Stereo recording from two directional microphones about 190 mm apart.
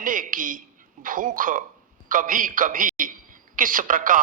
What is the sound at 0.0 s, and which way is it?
A man's voice, 45° right (ahead or behind).